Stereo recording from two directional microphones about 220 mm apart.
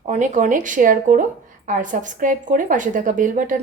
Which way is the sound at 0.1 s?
35° right (ahead or behind).